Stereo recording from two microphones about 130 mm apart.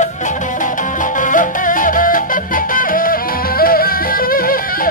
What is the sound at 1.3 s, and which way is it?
Music, 90° left.